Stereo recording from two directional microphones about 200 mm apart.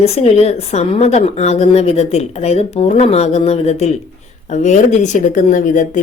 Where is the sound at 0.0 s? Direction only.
30° left (ahead or behind).